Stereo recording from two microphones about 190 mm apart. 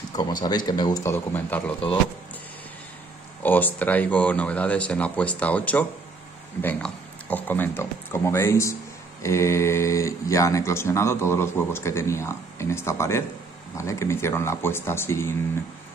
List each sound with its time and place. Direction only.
0.1 s speech: 20° left (ahead or behind)
3.4 s speech: 10° left (ahead or behind)